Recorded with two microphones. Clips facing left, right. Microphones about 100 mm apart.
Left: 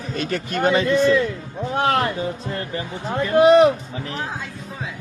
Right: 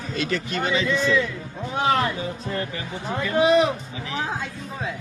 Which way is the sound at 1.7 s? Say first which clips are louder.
Left 2 dB; 55° left (ahead or behind).